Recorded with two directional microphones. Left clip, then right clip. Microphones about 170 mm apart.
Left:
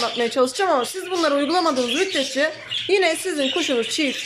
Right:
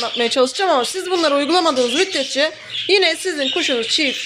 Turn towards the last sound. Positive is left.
turn(degrees=10)  # may be behind; listen again after turning